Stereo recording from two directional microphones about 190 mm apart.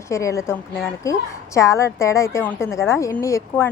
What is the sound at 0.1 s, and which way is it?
A woman's voice, 15° left (ahead or behind).